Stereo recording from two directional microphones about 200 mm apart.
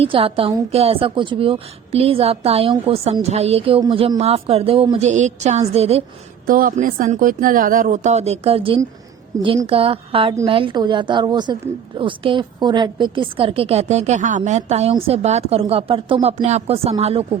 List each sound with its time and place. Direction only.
0.0 s a woman's voice: 30° right (ahead or behind)
6.5 s a woman's voice: 45° right (ahead or behind); by 9.5 s 15° right (ahead or behind)
9.6 s a woman's voice: 30° right (ahead or behind)